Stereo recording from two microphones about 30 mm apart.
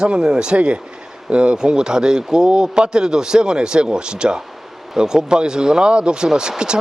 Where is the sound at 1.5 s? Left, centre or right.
Right.